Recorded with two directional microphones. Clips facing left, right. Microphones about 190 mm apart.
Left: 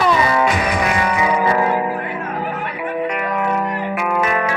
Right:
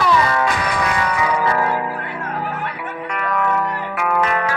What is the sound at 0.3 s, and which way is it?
Music, 15° left (ahead or behind).